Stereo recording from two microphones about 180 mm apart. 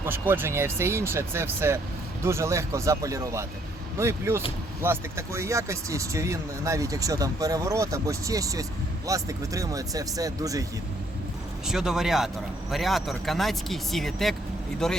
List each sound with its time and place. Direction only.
0.0 s speech: 10° right (ahead or behind)
11.6 s speech: centre (ahead or behind)